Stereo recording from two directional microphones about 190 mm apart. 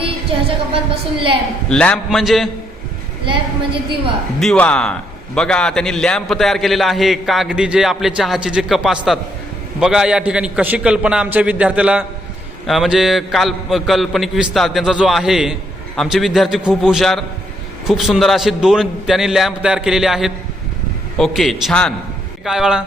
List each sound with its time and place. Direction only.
0.0 s a woman's voice: 30° right (ahead or behind)
1.7 s a man's voice: 5° left (ahead or behind)
3.2 s a woman's voice: 25° right (ahead or behind)
4.4 s a man's voice: 5° left (ahead or behind)